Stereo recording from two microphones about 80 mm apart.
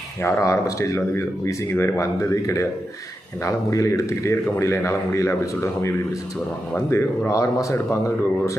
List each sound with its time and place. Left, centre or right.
0.2 s speech: left
6.9 s speech: left